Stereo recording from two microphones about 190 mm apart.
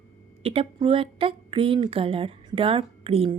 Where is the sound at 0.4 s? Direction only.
30° right (ahead or behind).